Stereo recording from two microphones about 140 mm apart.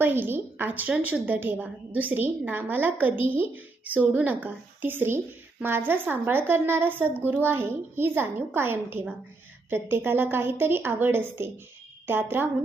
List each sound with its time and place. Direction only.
0.0 s a woman's voice: 15° right (ahead or behind)